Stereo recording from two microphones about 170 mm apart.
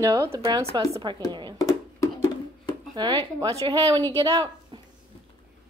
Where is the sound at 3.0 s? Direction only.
25° right (ahead or behind).